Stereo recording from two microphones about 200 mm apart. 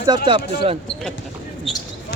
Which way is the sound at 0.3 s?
25° right (ahead or behind).